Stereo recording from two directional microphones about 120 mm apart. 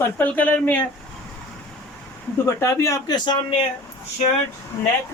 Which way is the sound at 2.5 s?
25° left (ahead or behind).